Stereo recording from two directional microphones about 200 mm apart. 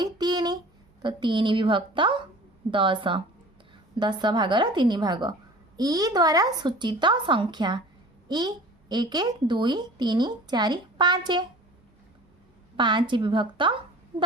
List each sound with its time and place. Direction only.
0.0 s a sound: 20° right (ahead or behind)
1.0 s a woman's voice: 25° right (ahead or behind)
12.7 s a woman's voice: 25° right (ahead or behind)